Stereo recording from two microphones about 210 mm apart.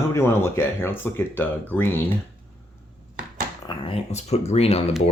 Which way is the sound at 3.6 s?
25° left (ahead or behind).